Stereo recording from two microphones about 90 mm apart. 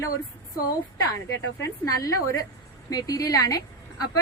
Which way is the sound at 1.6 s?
40° left (ahead or behind).